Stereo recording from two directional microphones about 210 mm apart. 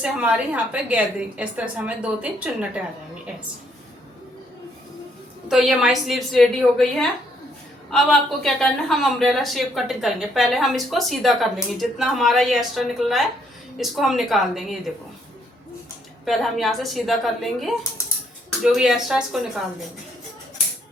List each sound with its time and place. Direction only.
0.0 s speech: 5° right (ahead or behind)
5.5 s speech: centre (ahead or behind)
16.2 s speech: centre (ahead or behind)